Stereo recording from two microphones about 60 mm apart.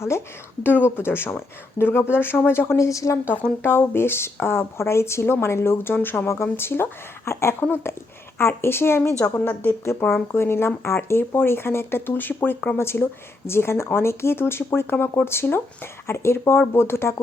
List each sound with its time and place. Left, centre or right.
0.1 s speech: left
0.6 s a woman's voice: left
2.7 s a woman's voice: left
3.6 s a woman's voice: left
7.6 s a woman's voice: left
10.3 s a woman's voice: left